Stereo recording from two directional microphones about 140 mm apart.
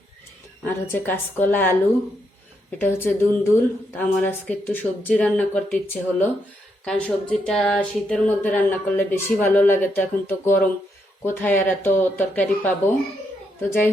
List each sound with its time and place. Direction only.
0.6 s speech: 15° left (ahead or behind)
2.7 s speech: 15° left (ahead or behind)